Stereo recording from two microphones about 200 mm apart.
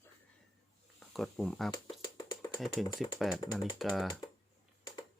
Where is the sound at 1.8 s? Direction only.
20° left (ahead or behind).